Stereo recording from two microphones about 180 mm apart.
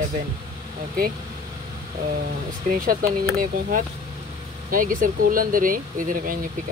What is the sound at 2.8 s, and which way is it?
Speech, 50° right (ahead or behind).